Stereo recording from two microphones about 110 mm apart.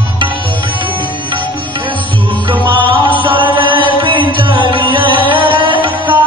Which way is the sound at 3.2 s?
50° right (ahead or behind).